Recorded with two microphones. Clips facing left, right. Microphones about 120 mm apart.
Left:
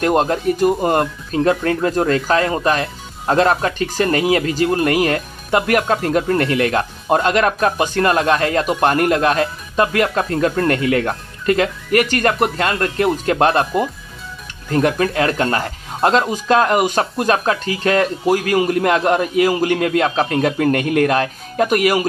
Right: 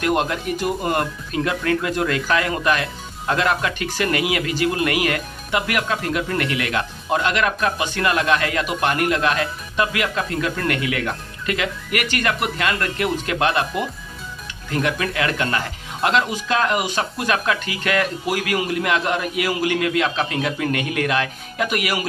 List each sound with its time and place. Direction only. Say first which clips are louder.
0.0 s speech: left 5 dB; 35° left (ahead or behind)